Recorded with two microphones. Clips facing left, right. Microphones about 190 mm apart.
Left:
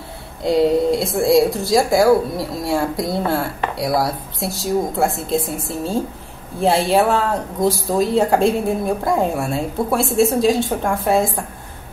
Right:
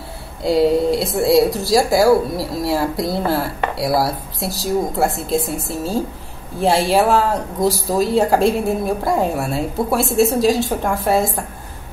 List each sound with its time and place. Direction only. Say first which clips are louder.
0.4 s speech: even; 5° right (ahead or behind)
6.6 s speech: even; centre (ahead or behind)